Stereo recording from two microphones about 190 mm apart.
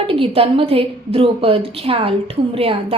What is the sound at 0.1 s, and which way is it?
A woman's voice, 30° right (ahead or behind).